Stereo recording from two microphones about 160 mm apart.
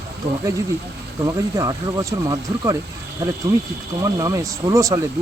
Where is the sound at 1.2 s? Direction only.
20° right (ahead or behind).